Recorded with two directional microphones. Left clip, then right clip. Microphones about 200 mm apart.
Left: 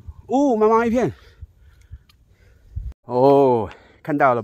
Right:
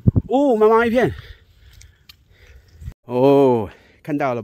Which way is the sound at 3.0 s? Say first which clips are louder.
Even; 30° right (ahead or behind).